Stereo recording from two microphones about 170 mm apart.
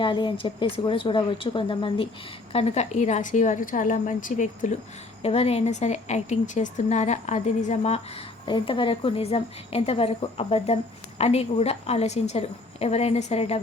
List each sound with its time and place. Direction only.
0.0 s a woman's voice: 30° left (ahead or behind)